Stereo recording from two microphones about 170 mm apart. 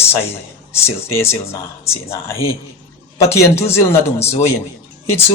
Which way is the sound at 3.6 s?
15° left (ahead or behind).